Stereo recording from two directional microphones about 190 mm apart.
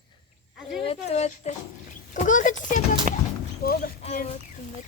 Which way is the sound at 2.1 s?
40° left (ahead or behind).